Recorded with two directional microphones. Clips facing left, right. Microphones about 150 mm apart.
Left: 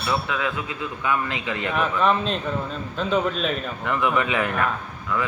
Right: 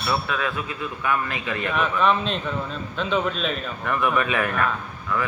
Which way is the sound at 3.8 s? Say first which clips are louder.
Even; 20° left (ahead or behind).